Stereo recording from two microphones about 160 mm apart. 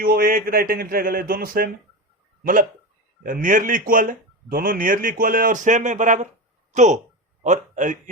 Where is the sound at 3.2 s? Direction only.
55° right (ahead or behind).